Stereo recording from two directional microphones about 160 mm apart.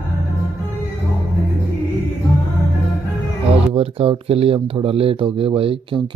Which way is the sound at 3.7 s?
35° right (ahead or behind).